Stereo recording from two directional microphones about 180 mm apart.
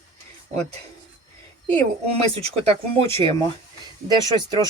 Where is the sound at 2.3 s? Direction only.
35° right (ahead or behind).